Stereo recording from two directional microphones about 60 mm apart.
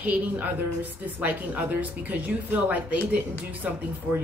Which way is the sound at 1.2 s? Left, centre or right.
Right.